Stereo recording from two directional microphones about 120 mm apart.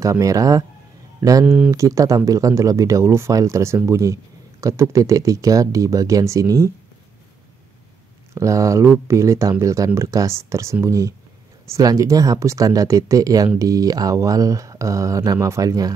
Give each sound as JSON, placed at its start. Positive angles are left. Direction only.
{"t": 0.0, "sound": "speech", "side_deg": -25}
{"t": 1.4, "sound": "speech", "side_deg": -10}
{"t": 1.7, "sound": "speech", "side_deg": -25}
{"t": 8.4, "sound": "speech", "side_deg": -25}